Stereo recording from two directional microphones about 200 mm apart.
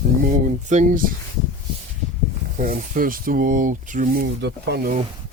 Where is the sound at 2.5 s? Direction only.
40° right (ahead or behind).